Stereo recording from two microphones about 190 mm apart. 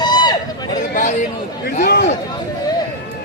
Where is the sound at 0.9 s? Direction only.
40° left (ahead or behind).